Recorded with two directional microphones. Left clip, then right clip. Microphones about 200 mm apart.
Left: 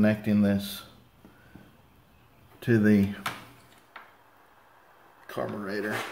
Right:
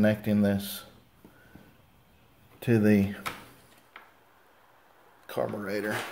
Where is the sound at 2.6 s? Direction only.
20° right (ahead or behind).